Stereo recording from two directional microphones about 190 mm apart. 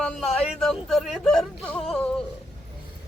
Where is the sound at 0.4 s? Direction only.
Centre (ahead or behind).